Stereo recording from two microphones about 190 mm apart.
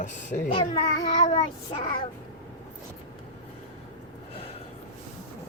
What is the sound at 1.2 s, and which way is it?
Child singing, 35° left (ahead or behind).